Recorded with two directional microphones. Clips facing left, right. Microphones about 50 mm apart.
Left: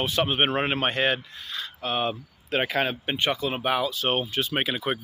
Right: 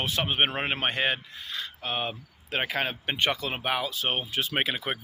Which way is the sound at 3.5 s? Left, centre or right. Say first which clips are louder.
Left 4 dB; right.